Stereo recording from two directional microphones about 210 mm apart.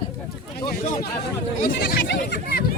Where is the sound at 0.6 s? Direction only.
45° left (ahead or behind).